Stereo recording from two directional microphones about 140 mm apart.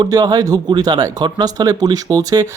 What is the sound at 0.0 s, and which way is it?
Speech, 30° right (ahead or behind).